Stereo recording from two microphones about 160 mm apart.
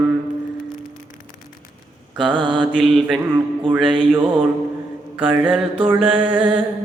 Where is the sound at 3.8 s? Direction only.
30° right (ahead or behind).